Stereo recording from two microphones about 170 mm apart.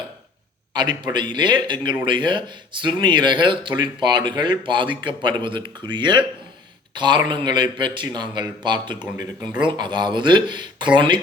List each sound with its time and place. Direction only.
0.7 s speech: 25° right (ahead or behind)